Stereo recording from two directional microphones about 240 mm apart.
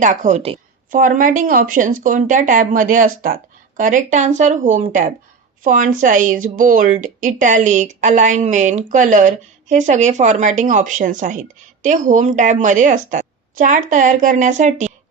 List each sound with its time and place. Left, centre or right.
0.0 s speech: right